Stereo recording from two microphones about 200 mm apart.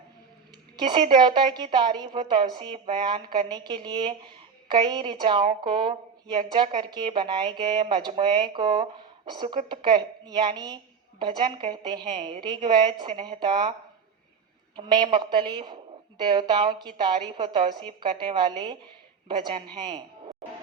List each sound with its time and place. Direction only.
0.8 s a woman's voice: 25° right (ahead or behind)
14.8 s a woman's voice: 20° right (ahead or behind)